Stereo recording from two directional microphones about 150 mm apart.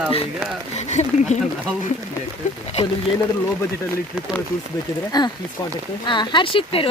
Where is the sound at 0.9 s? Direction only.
50° left (ahead or behind).